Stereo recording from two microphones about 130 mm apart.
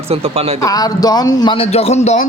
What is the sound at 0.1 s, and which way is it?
Speech, 50° right (ahead or behind).